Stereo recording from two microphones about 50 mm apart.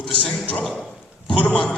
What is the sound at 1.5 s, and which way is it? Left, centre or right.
Speech, centre.